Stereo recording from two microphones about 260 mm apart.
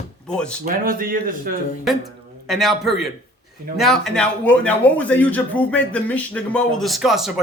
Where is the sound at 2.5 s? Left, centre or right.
Centre.